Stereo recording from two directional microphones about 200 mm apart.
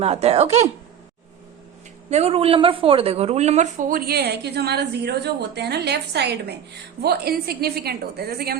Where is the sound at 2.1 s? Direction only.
30° right (ahead or behind).